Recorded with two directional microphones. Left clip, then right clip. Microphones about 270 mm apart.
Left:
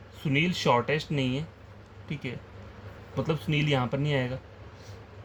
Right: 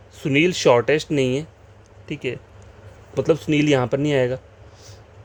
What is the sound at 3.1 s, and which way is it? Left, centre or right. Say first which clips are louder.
Speech: right 11 dB; right.